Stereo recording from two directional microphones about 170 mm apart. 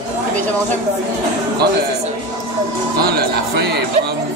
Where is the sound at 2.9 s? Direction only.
65° right (ahead or behind).